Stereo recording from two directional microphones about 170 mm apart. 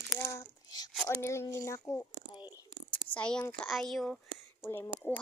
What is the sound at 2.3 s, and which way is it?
Whispering, 25° left (ahead or behind).